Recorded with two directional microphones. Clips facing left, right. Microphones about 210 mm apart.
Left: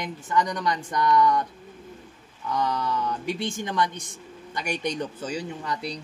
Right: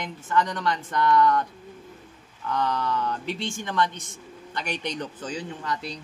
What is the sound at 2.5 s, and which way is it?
A man's voice, 15° left (ahead or behind).